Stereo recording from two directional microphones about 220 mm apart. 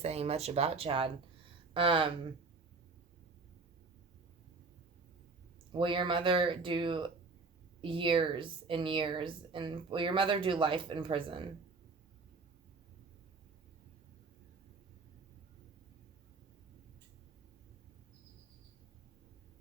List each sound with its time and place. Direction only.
0.0 s a woman's voice: 30° right (ahead or behind)
5.7 s a woman's voice: 20° right (ahead or behind)